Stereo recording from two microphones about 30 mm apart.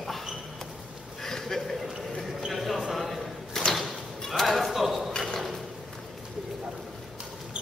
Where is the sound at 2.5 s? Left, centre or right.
Centre.